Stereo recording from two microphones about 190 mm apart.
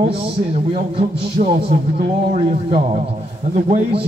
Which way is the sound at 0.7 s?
35° right (ahead or behind).